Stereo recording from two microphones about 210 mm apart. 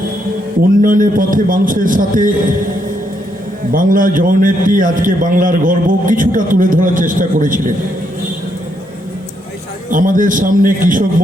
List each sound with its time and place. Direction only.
0.8 s a man's voice: 40° right (ahead or behind)
3.7 s a man's voice: 40° right (ahead or behind)
9.9 s a man's voice: 40° right (ahead or behind)